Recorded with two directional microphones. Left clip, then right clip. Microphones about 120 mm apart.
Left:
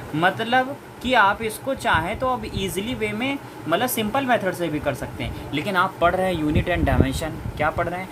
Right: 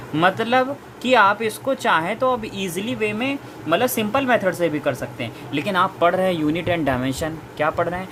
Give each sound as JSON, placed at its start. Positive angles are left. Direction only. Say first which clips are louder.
{"t": 0.2, "sound": "speech", "louder": "right 2 dB", "side_deg": -45}